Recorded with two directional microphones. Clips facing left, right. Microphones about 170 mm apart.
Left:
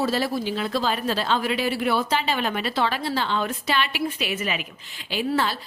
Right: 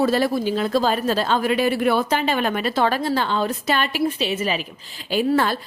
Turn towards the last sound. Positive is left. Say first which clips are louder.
# right 5 dB
turn(degrees=-50)  # may be behind; listen again after turning